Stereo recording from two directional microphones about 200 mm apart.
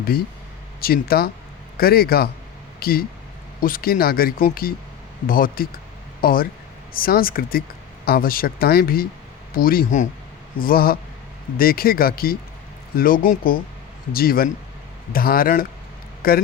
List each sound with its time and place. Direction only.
0.8 s speech: 50° left (ahead or behind)